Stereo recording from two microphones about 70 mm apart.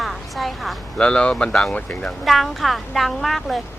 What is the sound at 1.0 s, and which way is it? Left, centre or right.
Speech, centre.